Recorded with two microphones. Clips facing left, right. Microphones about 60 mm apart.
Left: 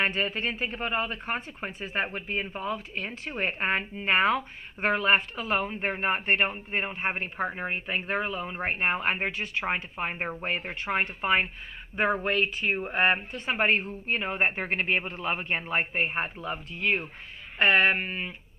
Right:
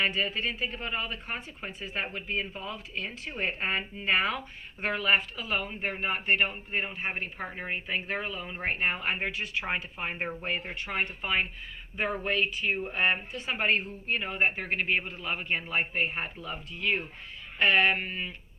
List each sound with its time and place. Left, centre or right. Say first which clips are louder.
0.0 s speech: left 1 dB; left
2.0 s speech: left 1 dB; left
9.6 s speech: left 3 dB; left